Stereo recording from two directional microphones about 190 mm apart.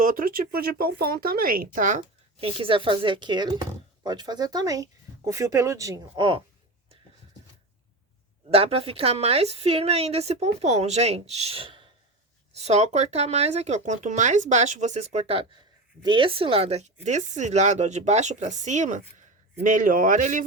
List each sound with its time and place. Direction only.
0.0 s speech: 45° right (ahead or behind)
2.4 s speech: 30° right (ahead or behind)
8.4 s a woman's voice: 30° right (ahead or behind)